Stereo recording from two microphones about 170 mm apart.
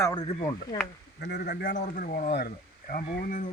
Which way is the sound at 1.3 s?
65° left (ahead or behind).